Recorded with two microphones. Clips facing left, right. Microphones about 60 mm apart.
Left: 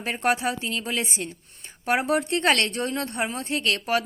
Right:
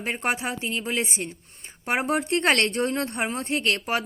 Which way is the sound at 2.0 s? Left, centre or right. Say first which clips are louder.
Right 2 dB; right.